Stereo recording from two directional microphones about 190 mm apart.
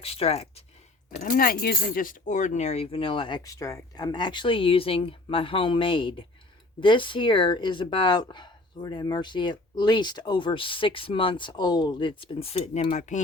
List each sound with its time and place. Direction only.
0.0 s speech: 30° left (ahead or behind)
1.2 s speech: 50° left (ahead or behind)